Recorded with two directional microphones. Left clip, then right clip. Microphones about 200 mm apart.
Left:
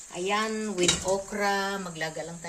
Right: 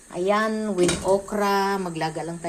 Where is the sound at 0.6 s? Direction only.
5° left (ahead or behind).